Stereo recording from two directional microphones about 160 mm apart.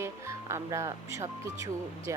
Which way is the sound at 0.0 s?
15° right (ahead or behind).